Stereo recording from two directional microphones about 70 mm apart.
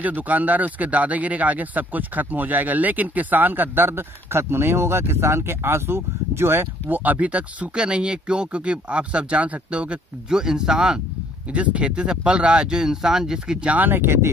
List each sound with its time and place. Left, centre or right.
0.0 s speech: right
7.0 s speech: right
13.7 s speech: right